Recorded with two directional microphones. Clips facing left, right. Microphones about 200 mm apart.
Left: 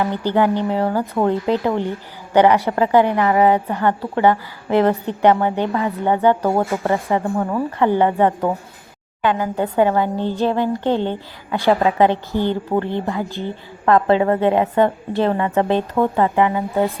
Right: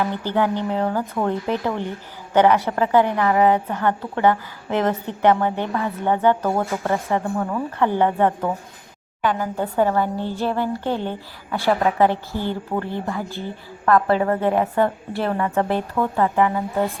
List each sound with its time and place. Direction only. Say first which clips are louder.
0.0 s a woman's voice: left 4 dB; 15° left (ahead or behind)